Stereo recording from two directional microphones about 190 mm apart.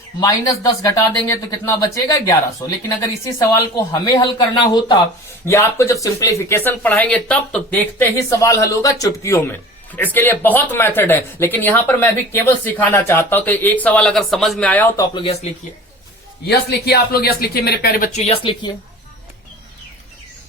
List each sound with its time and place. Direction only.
0.2 s speech: 20° left (ahead or behind)
15.1 s speech: 30° left (ahead or behind)
16.5 s speech: 60° left (ahead or behind)
18.2 s speech: 30° left (ahead or behind)